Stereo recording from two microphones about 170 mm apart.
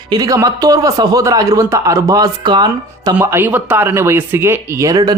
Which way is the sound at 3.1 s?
10° right (ahead or behind).